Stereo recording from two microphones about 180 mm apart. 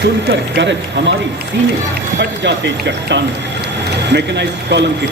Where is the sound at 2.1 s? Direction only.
75° right (ahead or behind).